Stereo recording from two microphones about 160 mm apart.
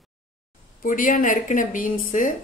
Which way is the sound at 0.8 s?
55° left (ahead or behind).